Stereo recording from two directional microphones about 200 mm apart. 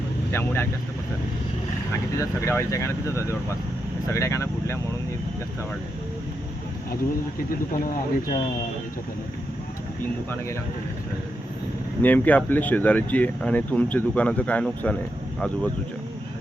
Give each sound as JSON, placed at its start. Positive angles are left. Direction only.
{"t": 0.3, "sound": "speech", "side_deg": 10}
{"t": 2.1, "sound": "speech", "side_deg": 15}
{"t": 7.7, "sound": "speech", "side_deg": 40}
{"t": 12.0, "sound": "speech", "side_deg": 10}